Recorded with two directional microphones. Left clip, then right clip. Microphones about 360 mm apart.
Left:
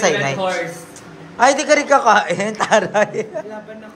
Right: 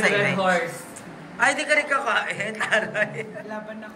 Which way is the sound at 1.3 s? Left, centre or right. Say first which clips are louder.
Left 7 dB; centre.